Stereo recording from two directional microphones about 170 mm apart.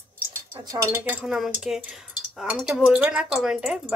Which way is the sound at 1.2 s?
Centre (ahead or behind).